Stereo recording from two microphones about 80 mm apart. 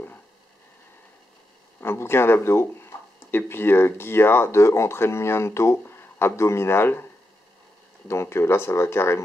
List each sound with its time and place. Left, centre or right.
1.8 s speech: left
8.1 s speech: left